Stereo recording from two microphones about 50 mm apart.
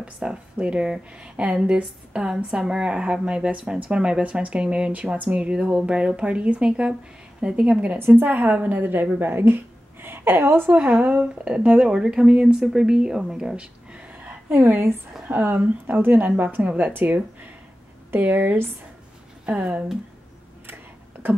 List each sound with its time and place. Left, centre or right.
0.0 s a woman's voice: centre
8.1 s a woman's voice: right
10.7 s a woman's voice: right
11.8 s a woman's voice: centre
14.5 s a woman's voice: right
15.2 s a woman's voice: right
18.2 s a woman's voice: right
21.2 s a sound: right